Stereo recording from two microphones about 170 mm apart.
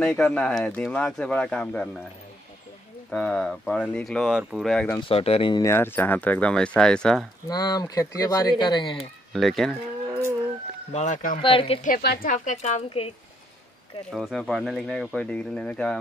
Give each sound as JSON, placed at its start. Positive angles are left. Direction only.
{"t": 0.0, "sound": "speech", "side_deg": 5}
{"t": 3.1, "sound": "speech", "side_deg": 5}
{"t": 5.0, "sound": "speech", "side_deg": 35}
{"t": 5.6, "sound": "speech", "side_deg": 15}
{"t": 7.4, "sound": "speech", "side_deg": 25}
{"t": 8.9, "sound": "speech", "side_deg": 0}
{"t": 10.9, "sound": "speech", "side_deg": 45}
{"t": 11.4, "sound": "speech", "side_deg": 35}
{"t": 11.8, "sound": "speech", "side_deg": 65}
{"t": 14.1, "sound": "speech", "side_deg": 0}